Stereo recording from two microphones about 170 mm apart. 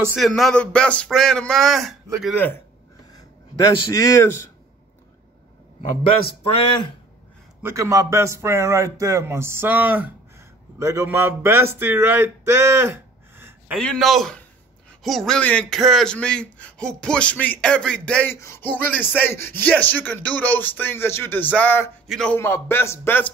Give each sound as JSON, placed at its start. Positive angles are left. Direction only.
{"t": 0.1, "sound": "speech", "side_deg": 0}
{"t": 3.9, "sound": "speech", "side_deg": 20}
{"t": 6.2, "sound": "speech", "side_deg": 30}
{"t": 7.6, "sound": "a man's voice", "side_deg": -20}
{"t": 13.7, "sound": "a man's voice", "side_deg": 0}
{"t": 22.4, "sound": "a man's voice", "side_deg": 15}